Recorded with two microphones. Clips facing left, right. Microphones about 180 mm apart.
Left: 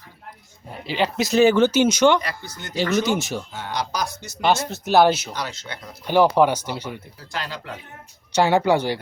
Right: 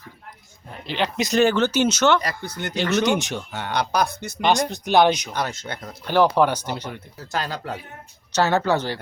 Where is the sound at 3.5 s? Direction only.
65° right (ahead or behind).